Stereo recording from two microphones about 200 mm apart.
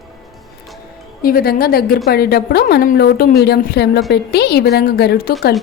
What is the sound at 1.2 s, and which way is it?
A woman's voice, 45° left (ahead or behind).